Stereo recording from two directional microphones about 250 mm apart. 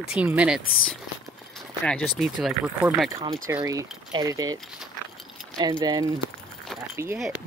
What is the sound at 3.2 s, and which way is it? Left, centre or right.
Speech, right.